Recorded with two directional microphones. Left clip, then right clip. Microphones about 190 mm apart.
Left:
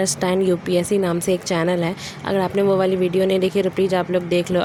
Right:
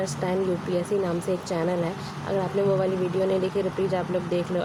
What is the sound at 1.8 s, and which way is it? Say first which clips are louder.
Speech: left 6 dB; 90° left.